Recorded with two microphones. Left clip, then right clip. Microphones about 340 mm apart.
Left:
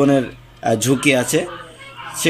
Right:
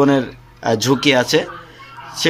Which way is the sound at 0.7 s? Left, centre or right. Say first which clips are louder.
Right 1 dB; right.